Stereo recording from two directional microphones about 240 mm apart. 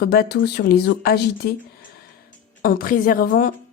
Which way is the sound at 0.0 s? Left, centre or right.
Left.